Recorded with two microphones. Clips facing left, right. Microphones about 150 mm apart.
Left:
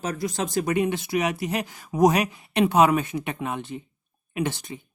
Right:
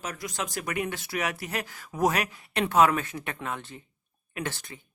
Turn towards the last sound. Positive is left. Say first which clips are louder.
# left 7 dB
turn(degrees=15)  # may be behind; listen again after turning